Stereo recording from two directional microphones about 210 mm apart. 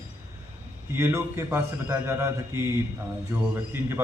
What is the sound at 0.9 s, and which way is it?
A man's voice, 10° right (ahead or behind).